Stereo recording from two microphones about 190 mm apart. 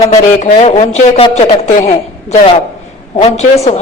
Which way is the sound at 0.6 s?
35° left (ahead or behind).